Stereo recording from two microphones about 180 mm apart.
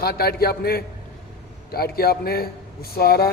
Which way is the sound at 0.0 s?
60° left (ahead or behind).